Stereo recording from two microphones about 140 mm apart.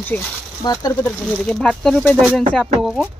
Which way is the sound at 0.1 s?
10° left (ahead or behind).